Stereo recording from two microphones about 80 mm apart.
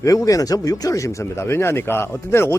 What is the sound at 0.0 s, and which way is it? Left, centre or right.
Speech, left.